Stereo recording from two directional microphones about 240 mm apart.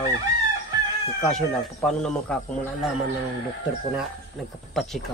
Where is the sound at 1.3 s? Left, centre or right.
Centre.